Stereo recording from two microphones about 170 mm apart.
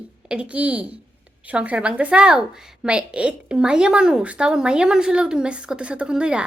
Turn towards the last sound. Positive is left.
turn(degrees=-5)  # may be behind; listen again after turning